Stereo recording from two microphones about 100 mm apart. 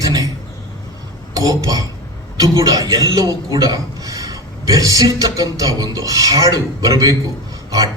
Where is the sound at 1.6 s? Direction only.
35° right (ahead or behind).